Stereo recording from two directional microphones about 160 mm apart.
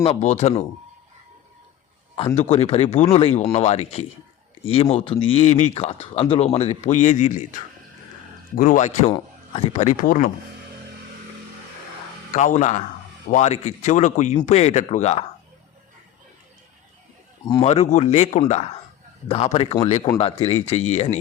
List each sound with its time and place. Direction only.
0.0 s a man's voice: 40° left (ahead or behind)
2.1 s a man's voice: 40° left (ahead or behind)
9.1 s a man's voice: 35° left (ahead or behind); by 10.3 s 60° left (ahead or behind)
12.3 s a man's voice: 50° left (ahead or behind)
17.6 s a man's voice: 45° left (ahead or behind)